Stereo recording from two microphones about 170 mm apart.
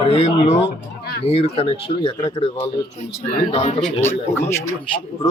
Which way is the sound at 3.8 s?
10° left (ahead or behind).